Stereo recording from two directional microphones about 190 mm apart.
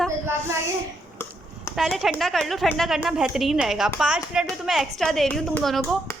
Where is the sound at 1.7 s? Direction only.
Centre (ahead or behind).